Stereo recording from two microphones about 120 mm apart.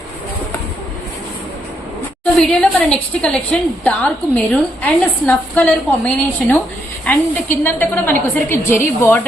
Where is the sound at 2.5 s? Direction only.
5° left (ahead or behind).